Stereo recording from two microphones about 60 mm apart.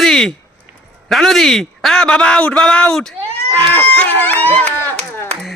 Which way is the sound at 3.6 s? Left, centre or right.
Left.